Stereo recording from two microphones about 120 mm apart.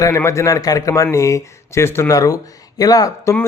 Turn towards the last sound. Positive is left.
turn(degrees=30)  # may be behind; listen again after turning